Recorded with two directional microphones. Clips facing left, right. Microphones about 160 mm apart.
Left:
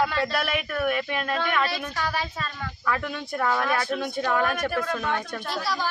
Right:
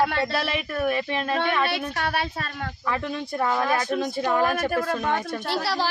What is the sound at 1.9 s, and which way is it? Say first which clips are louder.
Speech: right 2 dB; 60° right (ahead or behind).